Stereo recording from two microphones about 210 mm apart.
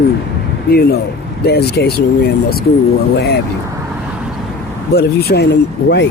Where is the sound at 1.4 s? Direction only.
50° left (ahead or behind).